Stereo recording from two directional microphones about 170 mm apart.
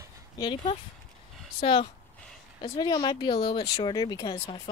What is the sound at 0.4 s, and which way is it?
Speech, 25° left (ahead or behind).